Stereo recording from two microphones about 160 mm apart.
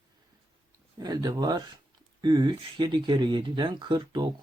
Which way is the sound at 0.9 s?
25° right (ahead or behind).